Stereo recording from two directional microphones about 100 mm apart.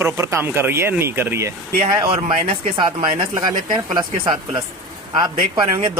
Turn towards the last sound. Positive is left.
turn(degrees=-45)  # may be behind; listen again after turning